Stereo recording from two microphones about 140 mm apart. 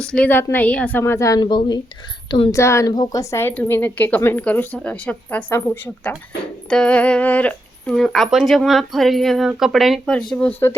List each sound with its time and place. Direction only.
0.0 s speech: 5° left (ahead or behind); by 1.8 s 30° left (ahead or behind)
2.5 s a woman's voice: 20° left (ahead or behind)